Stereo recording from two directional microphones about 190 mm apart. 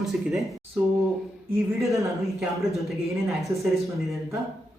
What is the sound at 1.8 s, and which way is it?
Speech, 15° right (ahead or behind).